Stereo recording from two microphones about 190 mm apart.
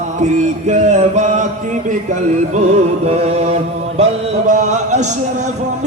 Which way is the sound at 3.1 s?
35° right (ahead or behind).